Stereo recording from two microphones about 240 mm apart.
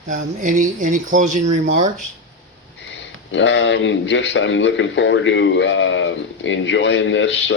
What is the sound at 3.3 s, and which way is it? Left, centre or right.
A man's voice, left.